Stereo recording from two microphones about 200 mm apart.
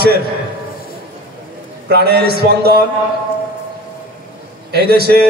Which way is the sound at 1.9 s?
55° right (ahead or behind).